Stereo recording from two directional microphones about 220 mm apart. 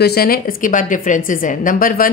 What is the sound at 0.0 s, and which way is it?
Speech, 45° left (ahead or behind).